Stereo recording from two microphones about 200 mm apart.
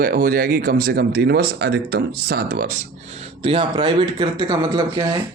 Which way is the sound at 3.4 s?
30° right (ahead or behind).